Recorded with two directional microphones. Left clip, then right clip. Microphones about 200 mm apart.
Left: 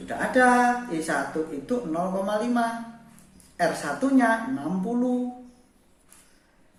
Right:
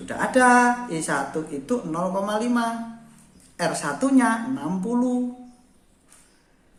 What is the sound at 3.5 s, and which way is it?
Speech, 40° right (ahead or behind).